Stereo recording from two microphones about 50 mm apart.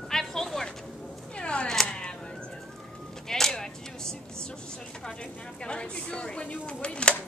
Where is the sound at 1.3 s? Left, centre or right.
Centre.